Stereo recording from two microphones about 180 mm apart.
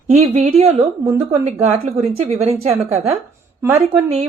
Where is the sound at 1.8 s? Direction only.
35° right (ahead or behind).